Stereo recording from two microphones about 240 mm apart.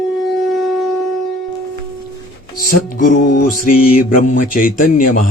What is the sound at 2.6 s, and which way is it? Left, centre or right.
Speech, left.